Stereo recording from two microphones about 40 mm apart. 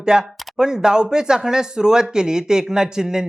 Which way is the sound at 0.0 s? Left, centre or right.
Centre.